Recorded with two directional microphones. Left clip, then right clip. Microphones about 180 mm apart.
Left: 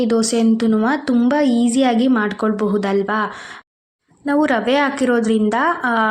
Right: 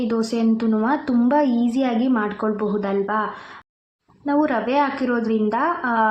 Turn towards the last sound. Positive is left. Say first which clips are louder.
# left 3 dB
turn(degrees=20)  # may be behind; listen again after turning